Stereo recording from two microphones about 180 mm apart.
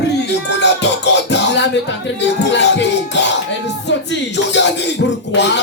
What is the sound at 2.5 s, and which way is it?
Music, 80° left.